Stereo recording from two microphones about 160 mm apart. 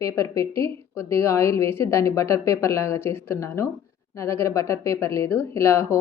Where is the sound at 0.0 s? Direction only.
20° left (ahead or behind).